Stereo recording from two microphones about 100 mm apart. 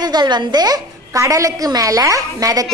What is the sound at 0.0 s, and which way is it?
A woman's voice, 45° right (ahead or behind).